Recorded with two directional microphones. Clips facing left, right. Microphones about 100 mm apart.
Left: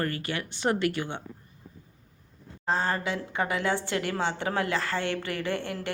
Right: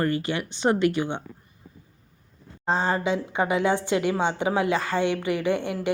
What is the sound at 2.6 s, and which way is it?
Speech, 20° right (ahead or behind).